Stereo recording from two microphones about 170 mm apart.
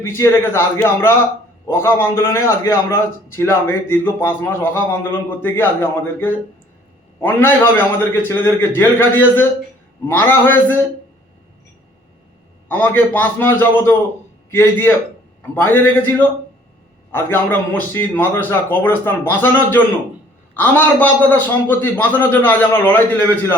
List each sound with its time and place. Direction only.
0.0 s a man's voice: 15° left (ahead or behind)
12.6 s a man's voice: 10° left (ahead or behind)